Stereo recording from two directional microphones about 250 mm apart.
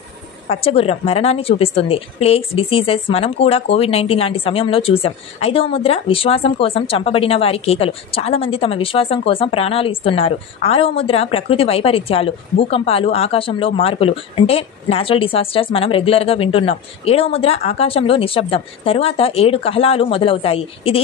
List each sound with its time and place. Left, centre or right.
0.5 s a woman's voice: left